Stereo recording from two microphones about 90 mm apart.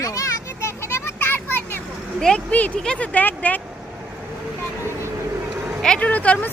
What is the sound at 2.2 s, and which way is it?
Speech, 10° left (ahead or behind).